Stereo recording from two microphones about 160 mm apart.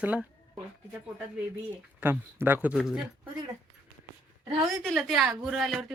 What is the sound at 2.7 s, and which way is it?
Speech, centre (ahead or behind).